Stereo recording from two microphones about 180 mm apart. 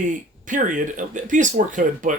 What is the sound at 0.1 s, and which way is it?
Speech, 45° right (ahead or behind).